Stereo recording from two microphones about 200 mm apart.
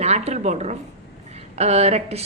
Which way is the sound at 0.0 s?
35° right (ahead or behind).